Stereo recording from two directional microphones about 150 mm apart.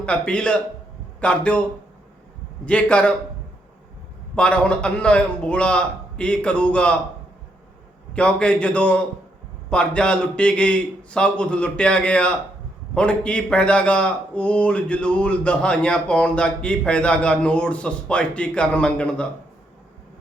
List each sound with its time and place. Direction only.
0.0 s a man's voice: 5° left (ahead or behind)
2.6 s a man's voice: 10° left (ahead or behind)
4.4 s a man's voice: 5° left (ahead or behind)
8.1 s a man's voice: 5° left (ahead or behind)